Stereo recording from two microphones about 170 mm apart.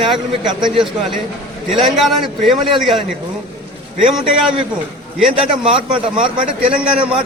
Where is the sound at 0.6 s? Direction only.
Centre (ahead or behind).